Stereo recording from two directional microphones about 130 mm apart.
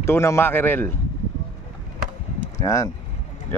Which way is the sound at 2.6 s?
25° left (ahead or behind).